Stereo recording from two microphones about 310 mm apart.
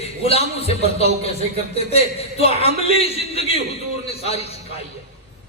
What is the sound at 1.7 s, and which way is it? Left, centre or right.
A man's voice, centre.